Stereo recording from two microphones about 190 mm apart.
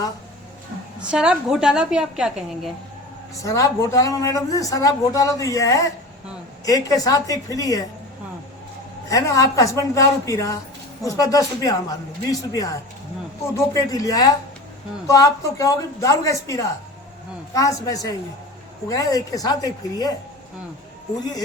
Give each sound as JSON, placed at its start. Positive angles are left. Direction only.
{"t": 0.9, "sound": "a woman's voice", "side_deg": -5}
{"t": 3.3, "sound": "speech", "side_deg": 15}
{"t": 9.0, "sound": "speech", "side_deg": 15}